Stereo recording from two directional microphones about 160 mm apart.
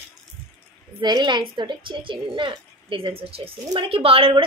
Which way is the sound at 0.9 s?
25° right (ahead or behind).